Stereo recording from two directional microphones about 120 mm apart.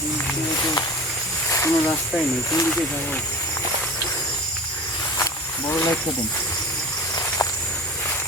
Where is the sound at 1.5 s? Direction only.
20° left (ahead or behind).